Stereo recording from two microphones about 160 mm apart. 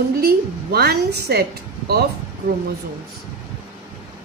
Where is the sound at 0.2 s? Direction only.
80° right.